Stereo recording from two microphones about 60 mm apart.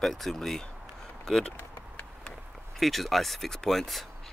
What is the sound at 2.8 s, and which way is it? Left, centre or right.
Speech, centre.